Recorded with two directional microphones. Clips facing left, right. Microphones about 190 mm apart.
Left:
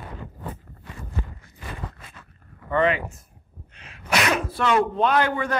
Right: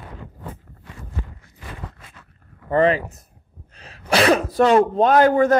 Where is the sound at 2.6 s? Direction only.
35° right (ahead or behind).